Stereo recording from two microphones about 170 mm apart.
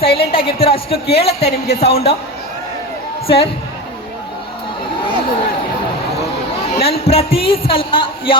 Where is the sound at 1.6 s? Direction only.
70° left (ahead or behind).